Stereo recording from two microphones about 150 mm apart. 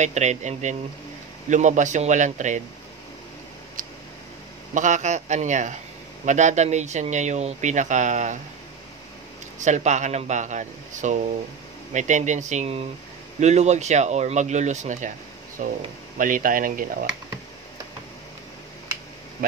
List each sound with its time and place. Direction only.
0.0 s speech: 50° right (ahead or behind)
3.8 s tick: 65° right (ahead or behind)
4.7 s speech: 55° right (ahead or behind)
9.6 s speech: 50° right (ahead or behind)